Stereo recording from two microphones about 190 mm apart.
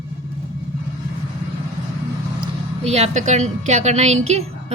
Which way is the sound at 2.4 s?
35° right (ahead or behind).